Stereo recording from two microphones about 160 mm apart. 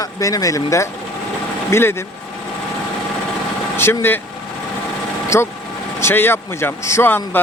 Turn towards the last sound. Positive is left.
turn(degrees=15)  # may be behind; listen again after turning